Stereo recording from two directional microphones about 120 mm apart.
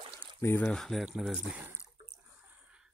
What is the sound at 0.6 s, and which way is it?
Speech, 5° left (ahead or behind).